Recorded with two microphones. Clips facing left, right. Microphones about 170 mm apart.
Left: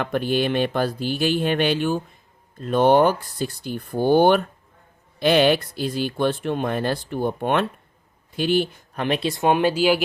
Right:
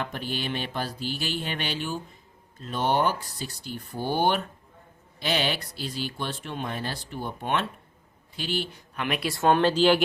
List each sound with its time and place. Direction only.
0.0 s speech: 55° left (ahead or behind)
9.0 s speech: 30° left (ahead or behind)
9.3 s speech: 15° left (ahead or behind)